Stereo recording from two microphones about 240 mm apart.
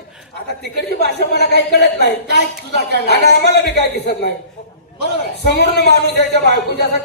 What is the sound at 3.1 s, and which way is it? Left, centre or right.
A man's voice, left.